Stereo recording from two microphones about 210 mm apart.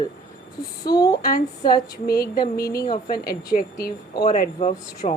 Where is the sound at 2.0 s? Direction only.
45° left (ahead or behind).